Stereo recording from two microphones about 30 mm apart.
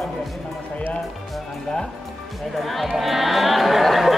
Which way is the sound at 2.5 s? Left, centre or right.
Centre.